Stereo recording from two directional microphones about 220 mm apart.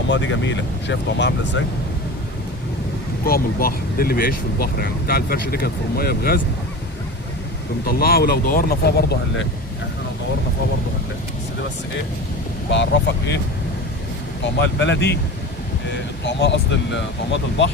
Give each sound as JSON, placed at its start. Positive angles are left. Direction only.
{"t": 0.1, "sound": "speech", "side_deg": 55}
{"t": 3.2, "sound": "speech", "side_deg": 45}
{"t": 7.9, "sound": "speech", "side_deg": 45}
{"t": 12.7, "sound": "speech", "side_deg": 50}
{"t": 14.6, "sound": "speech", "side_deg": 55}